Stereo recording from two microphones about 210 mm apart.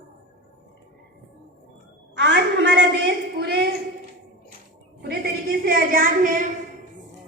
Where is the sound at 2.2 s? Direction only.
55° right (ahead or behind).